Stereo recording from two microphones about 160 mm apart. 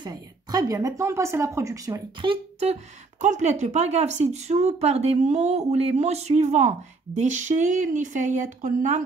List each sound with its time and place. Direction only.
0.0 s speech: 25° right (ahead or behind)
2.2 s speech: 40° right (ahead or behind)